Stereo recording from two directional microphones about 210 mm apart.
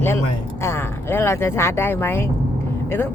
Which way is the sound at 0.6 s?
10° left (ahead or behind).